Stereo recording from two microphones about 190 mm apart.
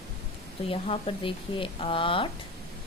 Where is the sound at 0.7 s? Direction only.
30° left (ahead or behind).